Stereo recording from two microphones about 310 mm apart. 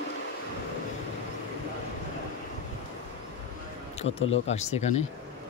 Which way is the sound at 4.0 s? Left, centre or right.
Centre.